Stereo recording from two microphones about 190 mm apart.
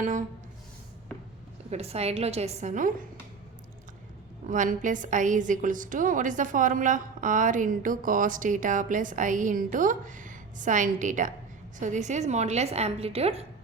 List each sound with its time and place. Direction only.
0.0 s a sound: 45° right (ahead or behind)
1.7 s a woman's voice: 35° right (ahead or behind)
4.4 s a woman's voice: 40° right (ahead or behind)